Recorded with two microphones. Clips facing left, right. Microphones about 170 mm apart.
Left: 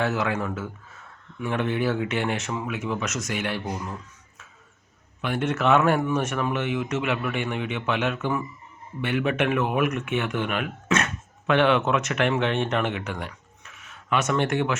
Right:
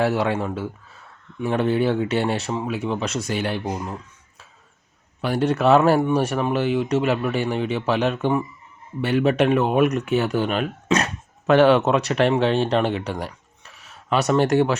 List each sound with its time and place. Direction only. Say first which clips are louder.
0.0 s speech: right 4 dB; 35° right (ahead or behind)